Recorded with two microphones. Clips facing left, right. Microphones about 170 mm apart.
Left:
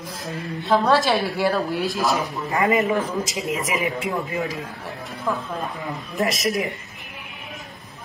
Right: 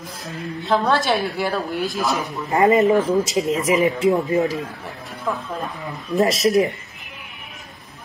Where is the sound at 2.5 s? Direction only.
30° right (ahead or behind).